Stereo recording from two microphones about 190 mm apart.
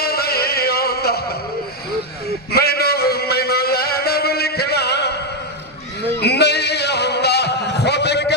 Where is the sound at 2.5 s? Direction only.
55° left (ahead or behind).